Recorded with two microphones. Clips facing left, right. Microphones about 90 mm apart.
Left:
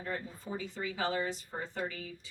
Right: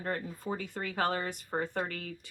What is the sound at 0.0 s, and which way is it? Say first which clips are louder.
Speech: right 4 dB; 55° right (ahead or behind).